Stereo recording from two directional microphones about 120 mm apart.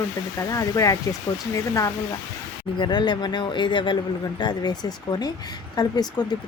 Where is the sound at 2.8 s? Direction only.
40° left (ahead or behind).